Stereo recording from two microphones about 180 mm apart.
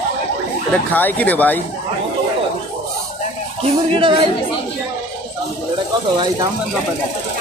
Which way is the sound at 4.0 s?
30° right (ahead or behind).